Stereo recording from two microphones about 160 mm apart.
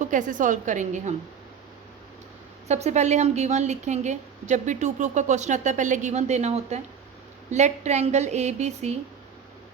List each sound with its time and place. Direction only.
0.0 s a woman's voice: 55° right (ahead or behind)
2.6 s a woman's voice: 45° right (ahead or behind)